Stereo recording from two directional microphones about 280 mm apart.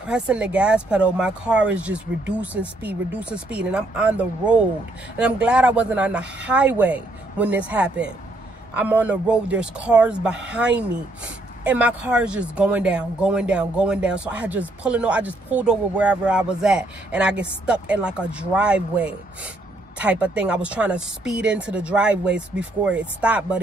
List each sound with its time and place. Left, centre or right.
0.0 s speech: centre